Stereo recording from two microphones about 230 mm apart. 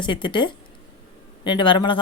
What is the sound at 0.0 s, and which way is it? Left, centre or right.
Speech, left.